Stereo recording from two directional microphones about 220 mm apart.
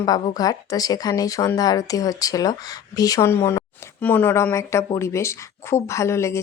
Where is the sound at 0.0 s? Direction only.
15° left (ahead or behind).